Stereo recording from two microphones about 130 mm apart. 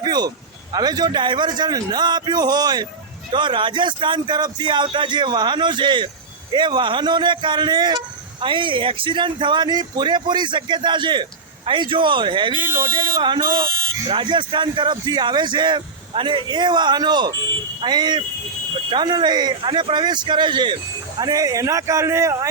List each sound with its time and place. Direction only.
0.0 s a man's voice: 30° right (ahead or behind)